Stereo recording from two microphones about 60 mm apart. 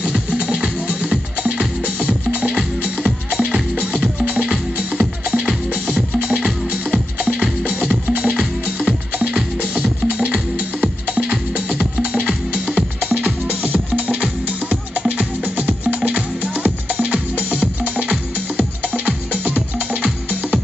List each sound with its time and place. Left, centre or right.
0.0 s music: centre
3.0 s music: centre
7.2 s music: right